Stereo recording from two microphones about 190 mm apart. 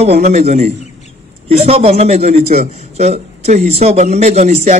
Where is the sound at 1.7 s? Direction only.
30° right (ahead or behind).